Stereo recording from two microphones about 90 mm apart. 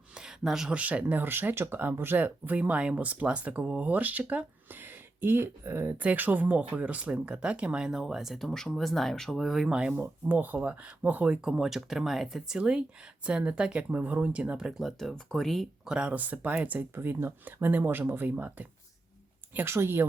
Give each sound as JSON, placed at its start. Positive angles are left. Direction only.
{"t": 0.1, "sound": "speech", "side_deg": -10}
{"t": 15.9, "sound": "speech", "side_deg": -10}